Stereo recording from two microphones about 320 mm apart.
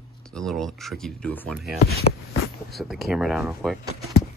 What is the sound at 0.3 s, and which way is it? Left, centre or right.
Speech, centre.